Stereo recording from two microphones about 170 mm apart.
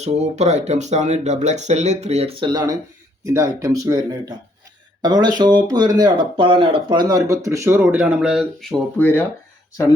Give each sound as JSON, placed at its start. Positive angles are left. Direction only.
{"t": 0.0, "sound": "speech", "side_deg": -40}
{"t": 9.0, "sound": "speech", "side_deg": 10}